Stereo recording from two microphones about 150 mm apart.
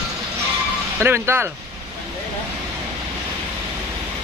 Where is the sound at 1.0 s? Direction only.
15° right (ahead or behind).